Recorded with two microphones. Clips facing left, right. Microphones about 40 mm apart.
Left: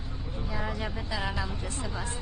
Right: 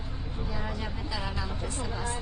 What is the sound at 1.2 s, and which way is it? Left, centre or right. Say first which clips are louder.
Speech: left 5 dB; centre.